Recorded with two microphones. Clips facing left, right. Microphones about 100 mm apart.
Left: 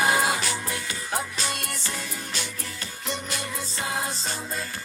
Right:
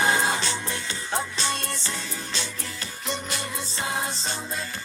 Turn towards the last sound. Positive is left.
turn(degrees=-30)  # may be behind; listen again after turning